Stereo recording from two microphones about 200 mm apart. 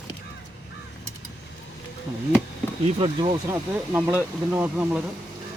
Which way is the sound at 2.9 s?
25° right (ahead or behind).